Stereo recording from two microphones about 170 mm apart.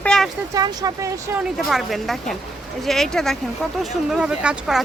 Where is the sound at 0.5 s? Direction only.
20° right (ahead or behind).